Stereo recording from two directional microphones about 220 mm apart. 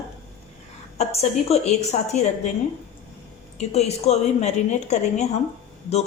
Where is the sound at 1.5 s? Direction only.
30° left (ahead or behind).